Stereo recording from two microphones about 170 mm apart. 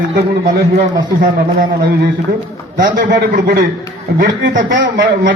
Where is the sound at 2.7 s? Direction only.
55° right (ahead or behind).